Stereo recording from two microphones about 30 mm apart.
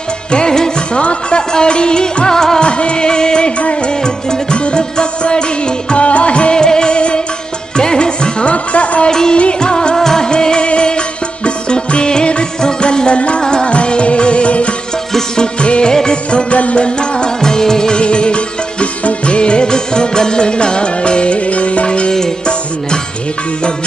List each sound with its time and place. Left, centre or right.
0.9 s music: left; by 2.6 s centre
2.6 s music: left
5.9 s music: left
6.5 s music: left
9.1 s music: left
9.6 s music of bollywood: left
9.9 s music: centre
10.3 s music: left
13.7 s music: left
15.9 s music: left
16.3 s music: left
17.4 s music: left
17.9 s music: left
21.5 s music: left